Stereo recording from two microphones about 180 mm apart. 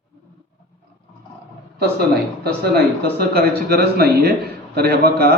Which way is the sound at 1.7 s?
60° right (ahead or behind).